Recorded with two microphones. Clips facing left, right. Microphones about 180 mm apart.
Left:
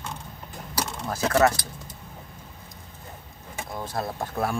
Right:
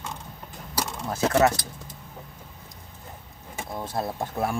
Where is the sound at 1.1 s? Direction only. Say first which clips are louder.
Even; 20° right (ahead or behind).